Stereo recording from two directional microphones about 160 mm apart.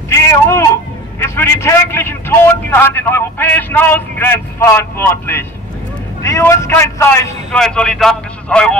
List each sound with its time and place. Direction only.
0.1 s a sound: 15° left (ahead or behind)
1.2 s a man's voice: 15° left (ahead or behind)
7.5 s a man's voice: 5° left (ahead or behind)